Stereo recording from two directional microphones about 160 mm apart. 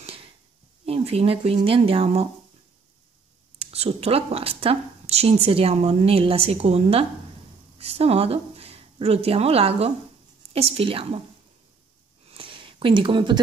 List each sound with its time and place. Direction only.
0.8 s a woman's voice: 35° right (ahead or behind)
3.5 s a woman's voice: 40° right (ahead or behind)
12.3 s a sound: 30° right (ahead or behind)